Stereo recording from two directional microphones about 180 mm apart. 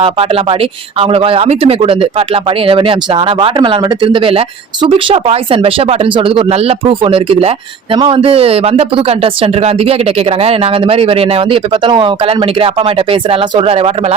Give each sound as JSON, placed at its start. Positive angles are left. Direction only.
{"t": 0.0, "sound": "speech", "side_deg": -30}